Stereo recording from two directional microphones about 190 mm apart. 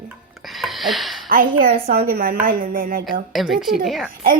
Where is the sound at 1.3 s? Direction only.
50° right (ahead or behind).